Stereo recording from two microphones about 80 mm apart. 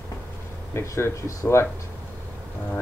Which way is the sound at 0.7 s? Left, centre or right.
Left.